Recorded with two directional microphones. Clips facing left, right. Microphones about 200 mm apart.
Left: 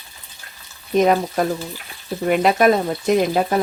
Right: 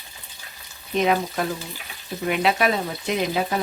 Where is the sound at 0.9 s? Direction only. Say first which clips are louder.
Left 5 dB; 45° left (ahead or behind).